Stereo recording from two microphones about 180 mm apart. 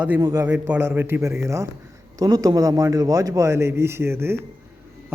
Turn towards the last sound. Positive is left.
turn(degrees=-15)  # may be behind; listen again after turning